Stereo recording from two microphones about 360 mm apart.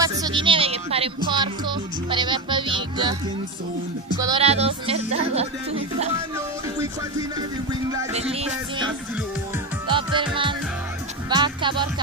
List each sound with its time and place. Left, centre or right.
0.0 s speech: centre
4.2 s speech: centre
7.9 s speech: centre
9.8 s music: centre
11.2 s speech: centre